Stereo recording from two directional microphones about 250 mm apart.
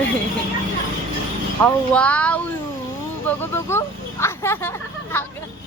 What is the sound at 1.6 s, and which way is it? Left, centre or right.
Speech, centre.